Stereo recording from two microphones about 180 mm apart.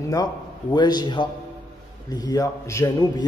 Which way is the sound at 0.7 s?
25° left (ahead or behind).